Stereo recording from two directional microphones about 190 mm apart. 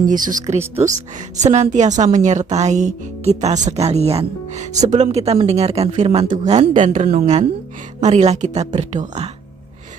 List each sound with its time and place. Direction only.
0.1 s a woman's voice: 45° right (ahead or behind)